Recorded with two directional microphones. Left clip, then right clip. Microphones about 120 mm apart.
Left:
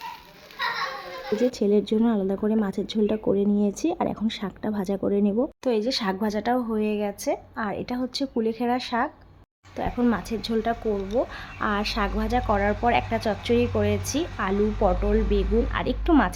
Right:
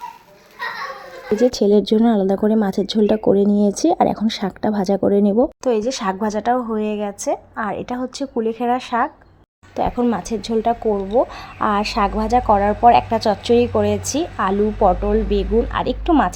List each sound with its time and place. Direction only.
1.4 s a woman's voice: 35° right (ahead or behind); by 9.0 s 10° right (ahead or behind)
10.0 s a woman's voice: 25° right (ahead or behind)
14.8 s a woman's voice: 10° right (ahead or behind)
15.3 s a woman's voice: 20° right (ahead or behind)